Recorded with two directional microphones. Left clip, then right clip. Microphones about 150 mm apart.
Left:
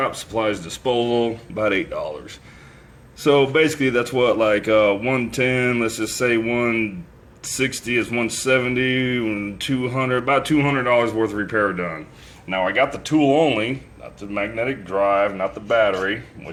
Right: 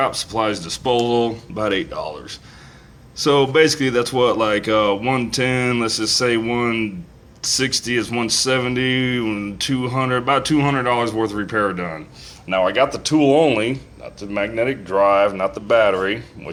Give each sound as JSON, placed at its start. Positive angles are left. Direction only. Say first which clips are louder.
{"t": 0.0, "sound": "speech", "louder": "right 2 dB", "side_deg": -5}